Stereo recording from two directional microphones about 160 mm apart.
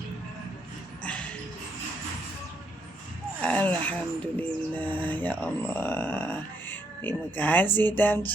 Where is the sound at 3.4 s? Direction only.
10° left (ahead or behind).